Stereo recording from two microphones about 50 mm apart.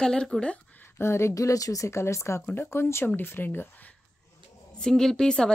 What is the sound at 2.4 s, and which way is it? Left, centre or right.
Speech, left.